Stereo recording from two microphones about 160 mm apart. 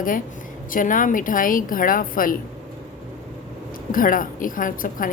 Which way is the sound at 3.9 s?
60° left (ahead or behind).